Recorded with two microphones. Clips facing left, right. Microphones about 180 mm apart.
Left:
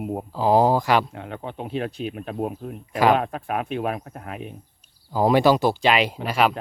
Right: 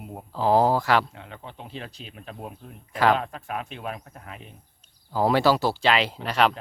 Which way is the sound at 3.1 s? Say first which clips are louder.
Left 6 dB; 60° left (ahead or behind).